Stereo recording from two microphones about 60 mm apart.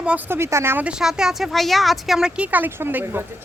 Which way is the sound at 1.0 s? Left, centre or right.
Centre.